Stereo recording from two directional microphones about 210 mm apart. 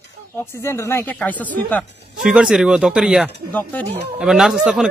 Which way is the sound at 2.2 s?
5° right (ahead or behind).